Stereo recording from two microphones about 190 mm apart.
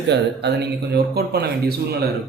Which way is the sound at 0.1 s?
60° right (ahead or behind).